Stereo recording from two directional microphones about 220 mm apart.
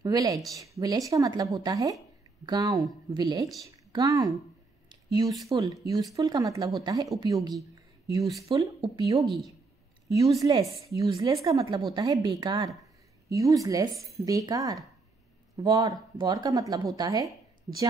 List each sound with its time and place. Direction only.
0.0 s speech: 15° right (ahead or behind)
10.3 s a man's voice: 15° right (ahead or behind)